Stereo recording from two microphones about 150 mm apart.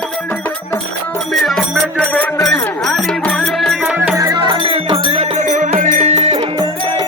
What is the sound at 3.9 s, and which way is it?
Music, 15° right (ahead or behind).